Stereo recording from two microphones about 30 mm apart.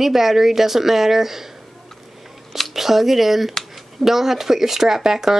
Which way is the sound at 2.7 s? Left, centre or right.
Centre.